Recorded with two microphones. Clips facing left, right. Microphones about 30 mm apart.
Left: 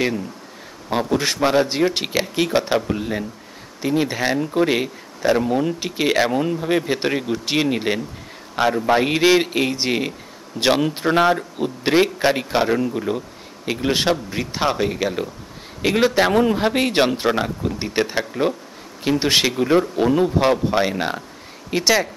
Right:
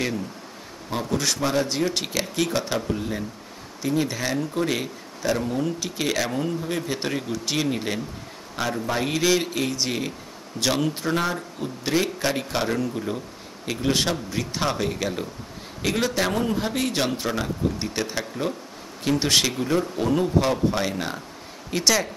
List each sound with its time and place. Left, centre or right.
0.8 s a man's voice: left
17.6 s speech: left